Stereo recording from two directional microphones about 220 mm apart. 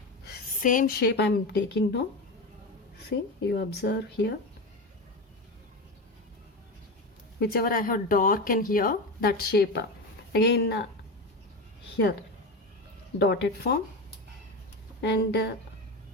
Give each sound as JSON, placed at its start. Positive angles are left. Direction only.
{"t": 0.3, "sound": "a woman's voice", "side_deg": 35}
{"t": 3.1, "sound": "speech", "side_deg": 50}
{"t": 7.3, "sound": "speech", "side_deg": 45}
{"t": 13.1, "sound": "speech", "side_deg": 50}
{"t": 15.0, "sound": "speech", "side_deg": 50}